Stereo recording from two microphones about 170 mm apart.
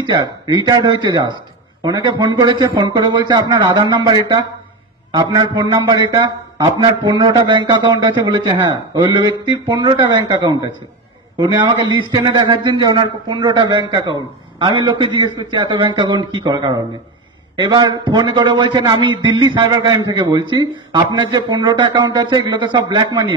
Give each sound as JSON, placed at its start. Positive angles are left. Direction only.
{"t": 0.0, "sound": "a man's voice", "side_deg": -25}
{"t": 11.3, "sound": "a man's voice", "side_deg": -25}